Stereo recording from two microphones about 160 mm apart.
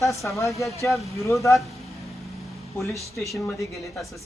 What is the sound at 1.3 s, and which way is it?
Speech, 15° left (ahead or behind).